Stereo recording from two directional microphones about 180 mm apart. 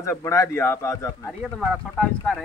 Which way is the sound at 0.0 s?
15° left (ahead or behind).